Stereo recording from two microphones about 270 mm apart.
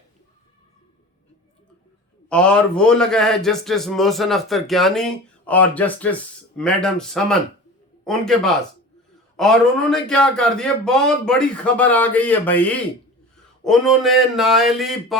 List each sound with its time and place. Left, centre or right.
2.3 s a man's voice: centre